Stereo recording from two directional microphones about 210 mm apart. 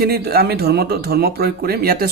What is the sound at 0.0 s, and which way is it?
Speech, 50° right (ahead or behind).